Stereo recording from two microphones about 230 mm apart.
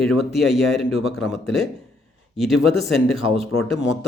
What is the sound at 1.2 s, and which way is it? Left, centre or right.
Speech, centre.